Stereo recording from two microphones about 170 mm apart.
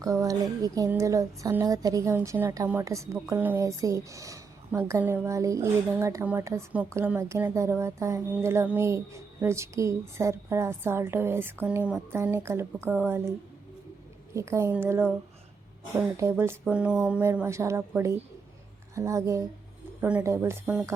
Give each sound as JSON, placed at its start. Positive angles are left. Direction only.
{"t": 0.0, "sound": "a woman's voice", "side_deg": -20}
{"t": 14.3, "sound": "a woman's voice", "side_deg": -15}
{"t": 16.3, "sound": "a woman's voice", "side_deg": -10}